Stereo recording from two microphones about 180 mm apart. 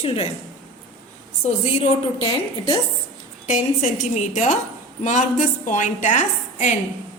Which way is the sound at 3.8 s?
40° left (ahead or behind).